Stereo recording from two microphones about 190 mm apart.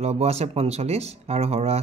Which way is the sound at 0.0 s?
35° right (ahead or behind).